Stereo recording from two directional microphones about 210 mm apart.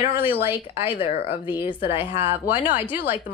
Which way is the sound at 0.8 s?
25° left (ahead or behind).